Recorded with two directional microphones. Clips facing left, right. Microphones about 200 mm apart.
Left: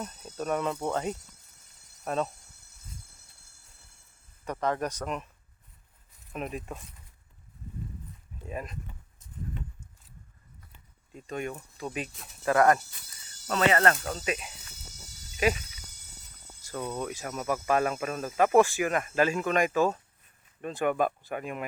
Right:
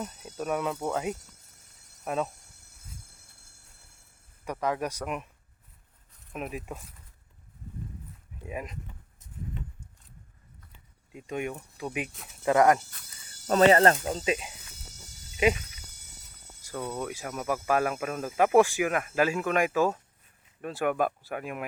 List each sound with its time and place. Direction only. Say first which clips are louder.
0.0 s speech: even; 10° right (ahead or behind)
4.4 s speech: even; 10° right (ahead or behind)
6.3 s speech: even; 5° right (ahead or behind)
8.4 s speech: even; 15° right (ahead or behind)
11.1 s speech: right 2 dB; 15° right (ahead or behind)
13.5 s speech: right 5 dB; 35° right (ahead or behind)
16.9 s speech: even; 10° right (ahead or behind)